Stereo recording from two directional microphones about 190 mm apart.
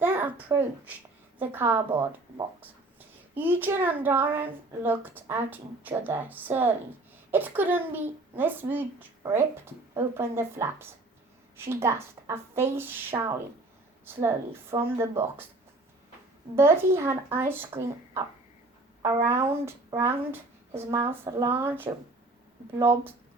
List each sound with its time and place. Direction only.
0.0 s a sound: 10° right (ahead or behind)
1.4 s a woman's voice: 10° right (ahead or behind)
3.3 s a woman's voice: 10° right (ahead or behind)
16.6 s a woman's voice: 15° right (ahead or behind)